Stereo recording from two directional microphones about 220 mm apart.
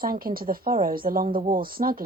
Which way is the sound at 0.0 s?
40° right (ahead or behind).